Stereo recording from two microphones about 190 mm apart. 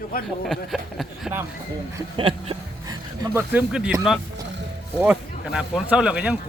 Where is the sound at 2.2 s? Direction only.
30° right (ahead or behind).